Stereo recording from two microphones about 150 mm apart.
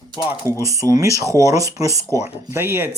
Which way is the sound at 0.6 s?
20° right (ahead or behind).